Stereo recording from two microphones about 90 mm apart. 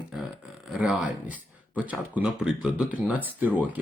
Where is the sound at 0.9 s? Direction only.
15° right (ahead or behind).